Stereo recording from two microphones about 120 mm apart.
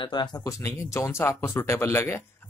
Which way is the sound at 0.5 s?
20° left (ahead or behind).